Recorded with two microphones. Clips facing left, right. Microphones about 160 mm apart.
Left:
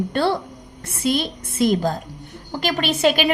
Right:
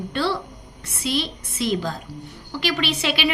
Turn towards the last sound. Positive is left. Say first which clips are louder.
# left 5 dB
turn(degrees=45)  # may be behind; listen again after turning